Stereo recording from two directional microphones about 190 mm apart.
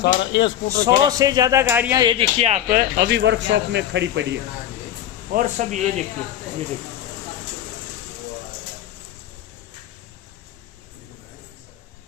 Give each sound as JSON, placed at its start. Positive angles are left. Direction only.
{"t": 0.0, "sound": "speech", "side_deg": 70}
{"t": 1.0, "sound": "speech", "side_deg": -20}
{"t": 2.0, "sound": "speech", "side_deg": -30}
{"t": 5.3, "sound": "speech", "side_deg": -40}